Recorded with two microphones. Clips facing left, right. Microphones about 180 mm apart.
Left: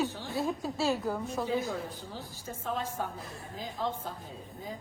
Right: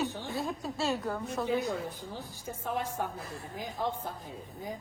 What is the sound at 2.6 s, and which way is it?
Speech, 15° right (ahead or behind).